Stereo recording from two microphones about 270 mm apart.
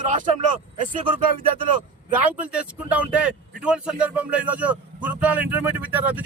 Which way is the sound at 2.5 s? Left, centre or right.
Centre.